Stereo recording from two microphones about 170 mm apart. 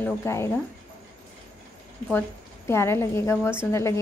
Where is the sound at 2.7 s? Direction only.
15° left (ahead or behind).